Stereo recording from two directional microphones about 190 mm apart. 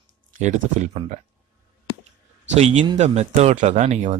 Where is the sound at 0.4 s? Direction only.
40° right (ahead or behind).